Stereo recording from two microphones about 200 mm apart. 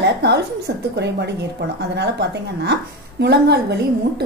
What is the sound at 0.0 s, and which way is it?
A woman's voice, 55° right (ahead or behind).